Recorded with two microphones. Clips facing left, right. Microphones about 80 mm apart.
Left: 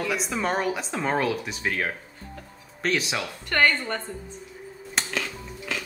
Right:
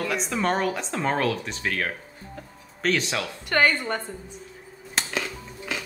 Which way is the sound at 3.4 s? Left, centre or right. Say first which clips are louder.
Right 1 dB; centre.